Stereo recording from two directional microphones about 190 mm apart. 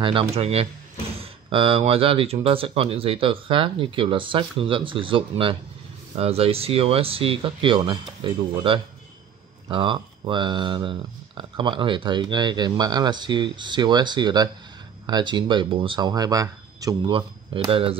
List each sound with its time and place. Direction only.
0.0 s speech: 30° right (ahead or behind)